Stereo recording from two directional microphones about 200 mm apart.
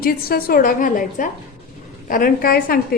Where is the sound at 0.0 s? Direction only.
45° left (ahead or behind).